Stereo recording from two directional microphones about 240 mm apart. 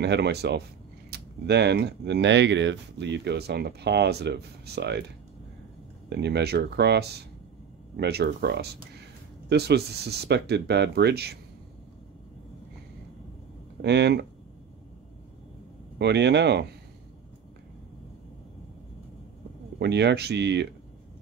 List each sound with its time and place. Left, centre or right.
0.0 s speech: right
6.0 s speech: right
13.7 s speech: right
16.0 s speech: right
19.8 s speech: right